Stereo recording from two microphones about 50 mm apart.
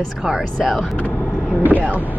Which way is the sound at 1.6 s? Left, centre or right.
Right.